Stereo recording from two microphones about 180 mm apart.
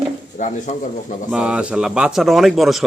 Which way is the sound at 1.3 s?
5° right (ahead or behind).